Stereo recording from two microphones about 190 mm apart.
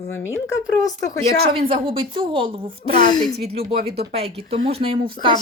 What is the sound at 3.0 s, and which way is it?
Speech, 25° left (ahead or behind).